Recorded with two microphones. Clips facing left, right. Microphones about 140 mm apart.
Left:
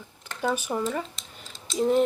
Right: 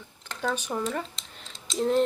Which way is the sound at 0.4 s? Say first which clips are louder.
Left 2 dB; 10° left (ahead or behind).